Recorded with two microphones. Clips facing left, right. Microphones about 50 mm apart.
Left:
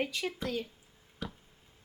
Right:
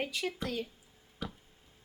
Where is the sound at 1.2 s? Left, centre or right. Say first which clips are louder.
Even; centre.